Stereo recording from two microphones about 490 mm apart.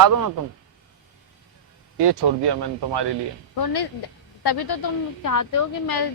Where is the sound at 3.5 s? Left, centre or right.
Left.